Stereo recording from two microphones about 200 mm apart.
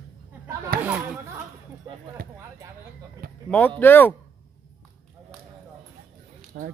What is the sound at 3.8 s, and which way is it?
Speech, 10° left (ahead or behind).